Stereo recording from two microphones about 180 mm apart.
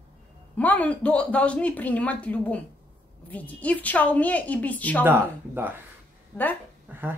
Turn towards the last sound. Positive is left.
turn(degrees=-10)  # may be behind; listen again after turning